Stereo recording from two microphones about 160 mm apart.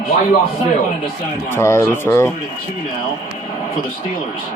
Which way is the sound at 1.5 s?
15° left (ahead or behind).